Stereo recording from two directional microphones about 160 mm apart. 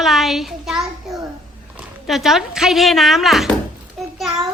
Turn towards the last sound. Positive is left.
turn(degrees=0)  # may be behind; listen again after turning